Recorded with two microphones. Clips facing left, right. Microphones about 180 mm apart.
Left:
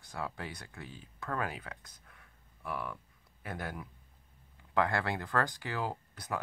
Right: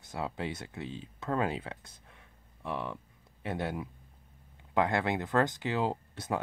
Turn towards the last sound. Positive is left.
turn(degrees=-25)  # may be behind; listen again after turning